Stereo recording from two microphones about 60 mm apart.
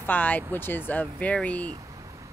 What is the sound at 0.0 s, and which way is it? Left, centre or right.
Speech, left.